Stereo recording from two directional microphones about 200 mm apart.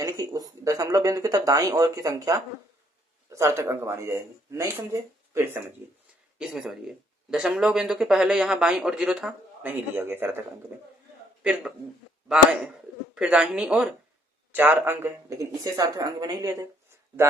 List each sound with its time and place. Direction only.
0.0 s speech: 20° right (ahead or behind)
6.4 s speech: centre (ahead or behind)
12.3 s speech: 5° right (ahead or behind)